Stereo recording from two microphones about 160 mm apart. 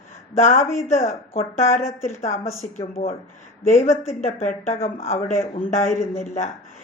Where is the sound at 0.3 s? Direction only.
50° left (ahead or behind).